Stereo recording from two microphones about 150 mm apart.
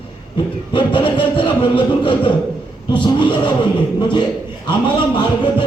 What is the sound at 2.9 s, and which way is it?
A man's voice, 35° left (ahead or behind).